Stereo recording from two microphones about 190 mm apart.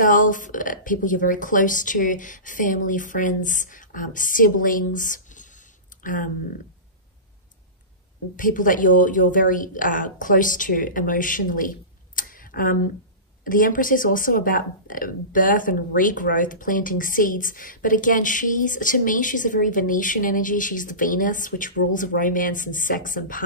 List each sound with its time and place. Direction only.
0.0 s speech: 45° left (ahead or behind)
8.4 s speech: 45° left (ahead or behind)
12.2 s tick-tock: 45° left (ahead or behind)
13.4 s speech: 45° left (ahead or behind)